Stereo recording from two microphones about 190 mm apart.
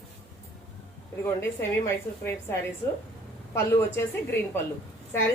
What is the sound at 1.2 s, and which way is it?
A woman's voice, 15° left (ahead or behind).